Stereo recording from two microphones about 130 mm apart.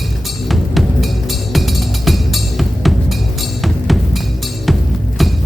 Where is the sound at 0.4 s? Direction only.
Centre (ahead or behind).